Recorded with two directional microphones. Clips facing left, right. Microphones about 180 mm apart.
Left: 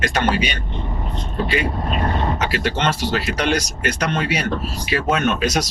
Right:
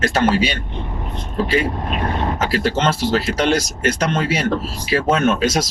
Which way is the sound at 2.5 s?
40° right (ahead or behind).